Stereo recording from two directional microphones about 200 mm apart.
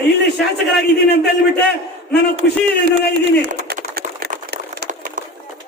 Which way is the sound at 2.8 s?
50° right (ahead or behind).